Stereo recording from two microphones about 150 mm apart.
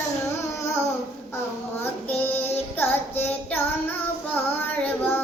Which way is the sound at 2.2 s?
15° left (ahead or behind).